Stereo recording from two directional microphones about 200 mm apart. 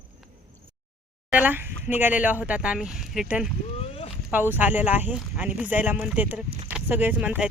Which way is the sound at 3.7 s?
30° left (ahead or behind).